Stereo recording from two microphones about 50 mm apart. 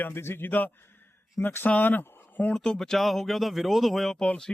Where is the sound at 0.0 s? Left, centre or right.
Left.